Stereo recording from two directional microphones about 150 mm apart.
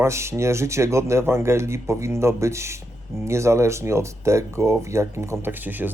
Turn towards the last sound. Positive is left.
turn(degrees=-10)  # may be behind; listen again after turning